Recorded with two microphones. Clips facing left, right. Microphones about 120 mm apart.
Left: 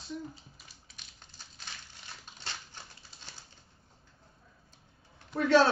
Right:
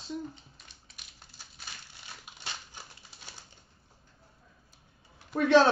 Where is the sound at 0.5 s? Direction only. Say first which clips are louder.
Even; 5° left (ahead or behind).